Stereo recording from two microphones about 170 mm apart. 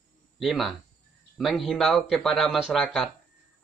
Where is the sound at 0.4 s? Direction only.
Centre (ahead or behind).